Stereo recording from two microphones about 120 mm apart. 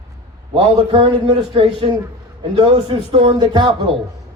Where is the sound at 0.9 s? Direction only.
50° right (ahead or behind).